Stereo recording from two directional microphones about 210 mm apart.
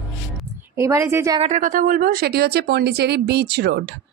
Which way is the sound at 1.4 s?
35° right (ahead or behind).